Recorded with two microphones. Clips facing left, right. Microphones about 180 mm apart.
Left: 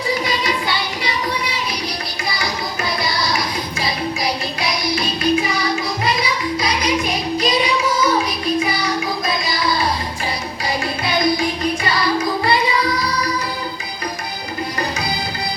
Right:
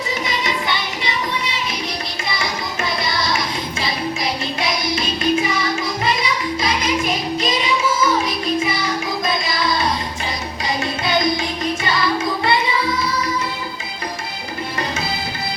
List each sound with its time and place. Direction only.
0.1 s music: 20° right (ahead or behind)
3.0 s music: 25° right (ahead or behind)
7.3 s child singing: 25° right (ahead or behind)
8.5 s music: 25° right (ahead or behind)